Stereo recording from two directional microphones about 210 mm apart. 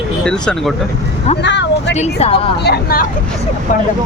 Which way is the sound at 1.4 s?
55° left (ahead or behind).